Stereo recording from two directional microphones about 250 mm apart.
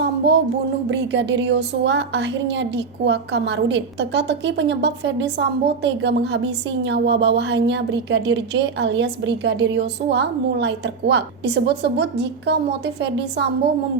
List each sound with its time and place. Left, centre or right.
0.9 s a woman's voice: right